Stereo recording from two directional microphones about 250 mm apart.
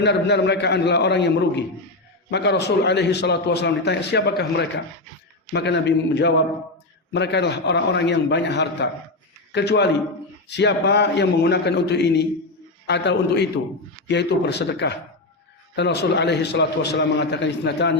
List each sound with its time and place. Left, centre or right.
0.0 s a man's voice: left